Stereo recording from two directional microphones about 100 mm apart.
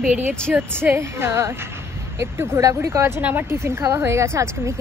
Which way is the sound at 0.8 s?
25° right (ahead or behind).